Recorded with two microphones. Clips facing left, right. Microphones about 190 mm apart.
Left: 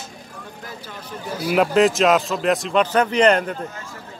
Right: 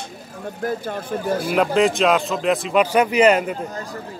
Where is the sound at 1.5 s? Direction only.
Centre (ahead or behind).